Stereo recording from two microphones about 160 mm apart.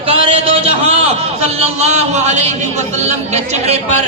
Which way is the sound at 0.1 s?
35° right (ahead or behind).